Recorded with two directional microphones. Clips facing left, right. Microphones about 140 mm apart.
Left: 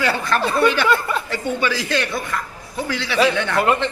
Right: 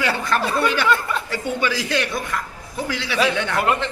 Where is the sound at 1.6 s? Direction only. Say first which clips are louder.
Even; 15° right (ahead or behind).